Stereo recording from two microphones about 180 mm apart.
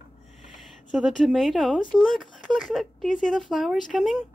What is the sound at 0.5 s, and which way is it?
Speech, centre (ahead or behind).